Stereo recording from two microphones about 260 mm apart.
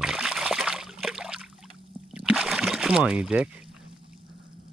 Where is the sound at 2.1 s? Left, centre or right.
Centre.